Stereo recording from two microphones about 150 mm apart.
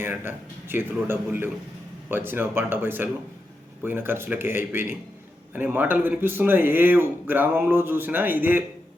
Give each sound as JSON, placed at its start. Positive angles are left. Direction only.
{"t": 0.0, "sound": "speech", "side_deg": -15}